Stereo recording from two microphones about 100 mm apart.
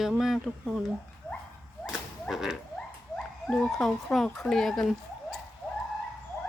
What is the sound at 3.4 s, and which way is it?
A woman's voice, 10° left (ahead or behind).